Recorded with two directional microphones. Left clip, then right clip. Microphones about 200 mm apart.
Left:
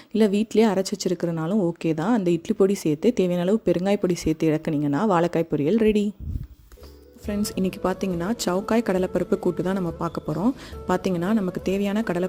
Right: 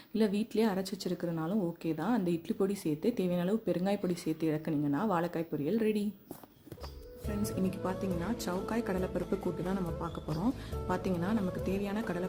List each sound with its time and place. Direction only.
0.1 s a woman's voice: 35° left (ahead or behind)
7.9 s speech: 45° left (ahead or behind)